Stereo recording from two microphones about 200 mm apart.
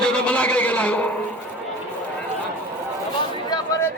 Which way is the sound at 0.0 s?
5° left (ahead or behind).